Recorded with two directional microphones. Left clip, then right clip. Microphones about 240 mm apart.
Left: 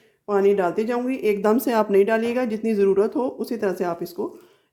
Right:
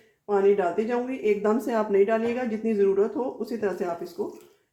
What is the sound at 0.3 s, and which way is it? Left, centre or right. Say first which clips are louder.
Speech: left 2 dB; left.